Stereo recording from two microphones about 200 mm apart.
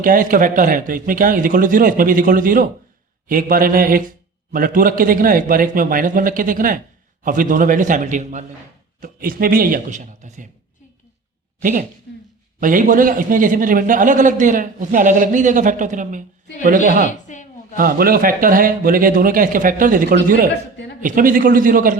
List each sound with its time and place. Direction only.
0.0 s a man's voice: 45° right (ahead or behind)
11.6 s a man's voice: 40° right (ahead or behind)
17.3 s a sound: 40° left (ahead or behind)
17.7 s a man's voice: 45° right (ahead or behind)
20.5 s a man's voice: 60° left (ahead or behind)
21.0 s a man's voice: 45° right (ahead or behind)